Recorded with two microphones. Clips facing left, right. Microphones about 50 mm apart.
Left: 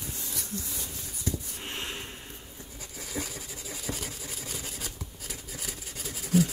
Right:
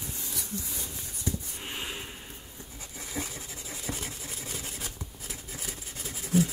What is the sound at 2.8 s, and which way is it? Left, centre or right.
Vehicle, right.